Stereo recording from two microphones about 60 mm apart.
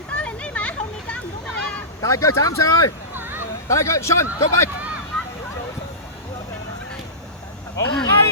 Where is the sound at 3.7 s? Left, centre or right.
Left.